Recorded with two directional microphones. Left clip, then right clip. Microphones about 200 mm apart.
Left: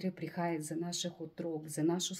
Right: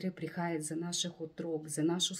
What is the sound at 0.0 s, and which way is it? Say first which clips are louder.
Speech: left 1 dB; 15° right (ahead or behind).